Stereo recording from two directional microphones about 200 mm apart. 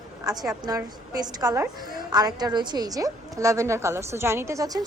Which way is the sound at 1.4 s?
15° right (ahead or behind).